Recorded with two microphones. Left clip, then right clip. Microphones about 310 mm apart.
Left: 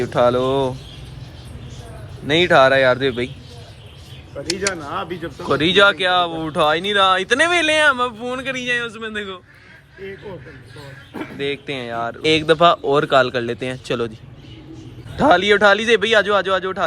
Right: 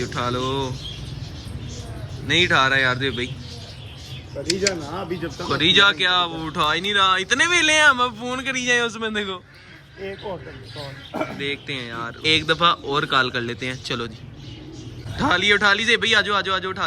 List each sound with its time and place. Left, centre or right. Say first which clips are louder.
0.0 s speech: left 9 dB; centre
2.2 s speech: left 5 dB; centre
4.4 s speech: even; centre
11.3 s speech: left 3 dB; centre
15.2 s speech: left 5 dB; centre